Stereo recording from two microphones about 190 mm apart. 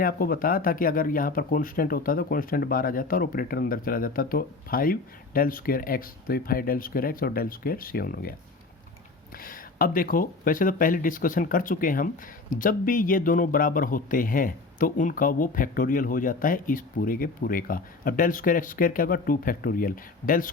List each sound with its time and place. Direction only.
0.0 s speech: 50° left (ahead or behind)
9.4 s speech: 50° left (ahead or behind)